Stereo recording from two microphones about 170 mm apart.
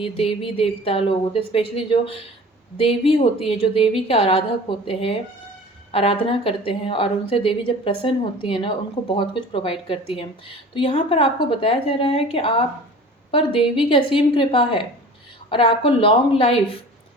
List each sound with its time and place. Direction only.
0.0 s a woman's voice: 35° left (ahead or behind)